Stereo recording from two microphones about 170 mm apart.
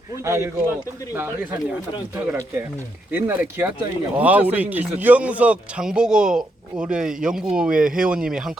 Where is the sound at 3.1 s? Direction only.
10° right (ahead or behind).